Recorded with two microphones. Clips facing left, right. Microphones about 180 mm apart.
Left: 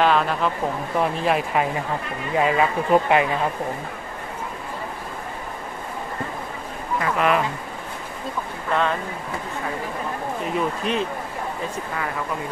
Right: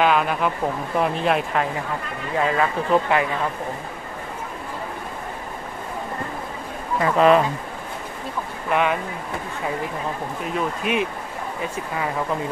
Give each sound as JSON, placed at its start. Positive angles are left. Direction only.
{"t": 0.0, "sound": "speech", "side_deg": -5}
{"t": 7.2, "sound": "speech", "side_deg": -30}
{"t": 8.6, "sound": "speech", "side_deg": -15}
{"t": 10.5, "sound": "speech", "side_deg": -10}